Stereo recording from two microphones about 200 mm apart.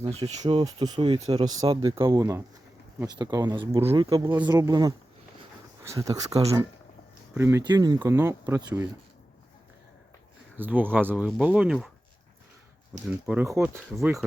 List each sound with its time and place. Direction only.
0.0 s speech: 30° right (ahead or behind)
4.2 s speech: 10° right (ahead or behind)
7.3 s speech: 15° right (ahead or behind)
10.6 s speech: 10° right (ahead or behind)
13.1 s speech: 5° right (ahead or behind)